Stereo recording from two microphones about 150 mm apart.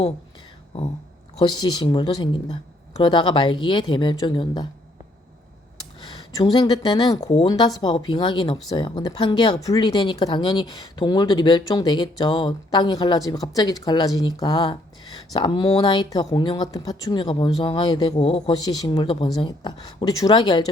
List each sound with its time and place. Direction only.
1.4 s speech: 30° left (ahead or behind)
6.0 s speech: 30° left (ahead or behind)
18.5 s speech: 25° left (ahead or behind)